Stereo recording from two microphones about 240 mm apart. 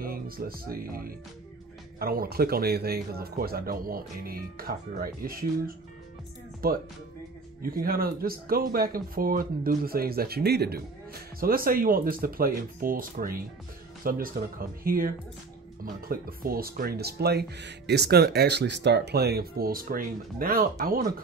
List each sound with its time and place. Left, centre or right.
0.0 s speech: right
7.6 s speech: right